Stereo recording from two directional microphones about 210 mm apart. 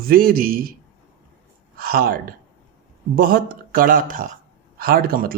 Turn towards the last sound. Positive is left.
turn(degrees=-45)  # may be behind; listen again after turning